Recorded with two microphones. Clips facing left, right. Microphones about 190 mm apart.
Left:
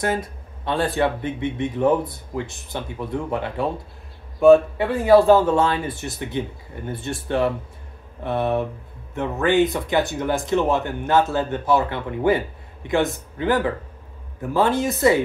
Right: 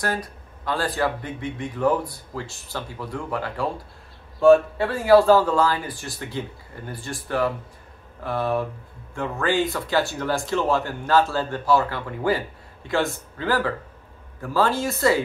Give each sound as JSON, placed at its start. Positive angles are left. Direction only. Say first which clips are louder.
{"t": 0.0, "sound": "speech", "louder": "left 4 dB", "side_deg": 25}